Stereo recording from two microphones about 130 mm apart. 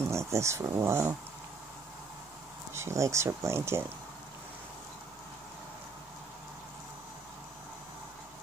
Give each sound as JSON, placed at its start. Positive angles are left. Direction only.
{"t": 0.0, "sound": "speech", "side_deg": -20}
{"t": 2.7, "sound": "speech", "side_deg": -20}